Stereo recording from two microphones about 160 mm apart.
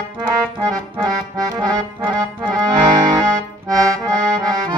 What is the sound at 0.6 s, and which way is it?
Accordion, 20° right (ahead or behind).